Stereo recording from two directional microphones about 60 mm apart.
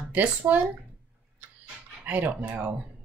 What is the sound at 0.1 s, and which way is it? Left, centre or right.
Speech, right.